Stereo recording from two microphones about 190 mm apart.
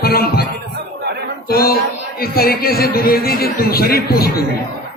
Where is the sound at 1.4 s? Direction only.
55° left (ahead or behind).